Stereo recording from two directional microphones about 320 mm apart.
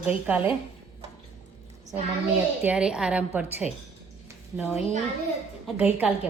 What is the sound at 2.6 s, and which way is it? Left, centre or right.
A woman's voice, centre.